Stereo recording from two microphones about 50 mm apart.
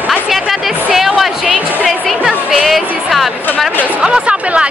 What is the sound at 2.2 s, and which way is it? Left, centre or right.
Music, centre.